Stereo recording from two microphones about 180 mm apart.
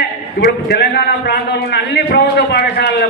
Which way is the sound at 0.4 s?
65° left (ahead or behind).